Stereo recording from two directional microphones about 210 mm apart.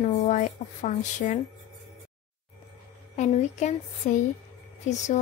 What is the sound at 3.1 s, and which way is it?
A woman's voice, 35° left (ahead or behind).